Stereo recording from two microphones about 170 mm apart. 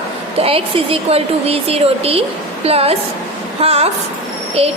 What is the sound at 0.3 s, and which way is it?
A woman's voice, 35° right (ahead or behind).